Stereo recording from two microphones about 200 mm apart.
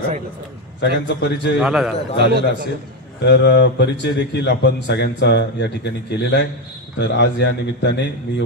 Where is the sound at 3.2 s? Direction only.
60° left (ahead or behind).